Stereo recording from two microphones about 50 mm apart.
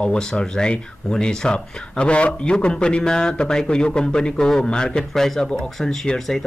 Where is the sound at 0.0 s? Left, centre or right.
Centre.